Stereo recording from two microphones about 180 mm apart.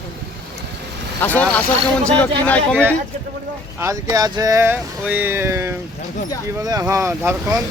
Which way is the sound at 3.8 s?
15° right (ahead or behind).